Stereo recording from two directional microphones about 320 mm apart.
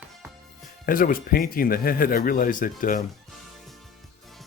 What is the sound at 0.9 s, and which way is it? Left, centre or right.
Speech, left.